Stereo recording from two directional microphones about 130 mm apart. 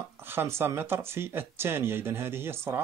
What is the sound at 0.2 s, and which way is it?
Speech, 15° right (ahead or behind).